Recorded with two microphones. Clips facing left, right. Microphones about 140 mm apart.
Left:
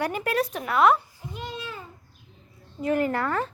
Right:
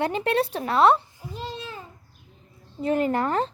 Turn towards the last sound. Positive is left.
turn(degrees=-20)  # may be behind; listen again after turning